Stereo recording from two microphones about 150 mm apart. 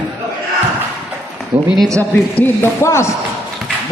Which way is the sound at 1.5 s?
10° right (ahead or behind).